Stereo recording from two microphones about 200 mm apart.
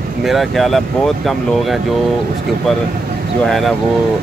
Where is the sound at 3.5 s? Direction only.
Centre (ahead or behind).